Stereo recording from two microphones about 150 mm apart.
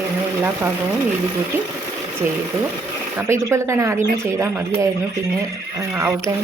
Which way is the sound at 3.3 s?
20° right (ahead or behind).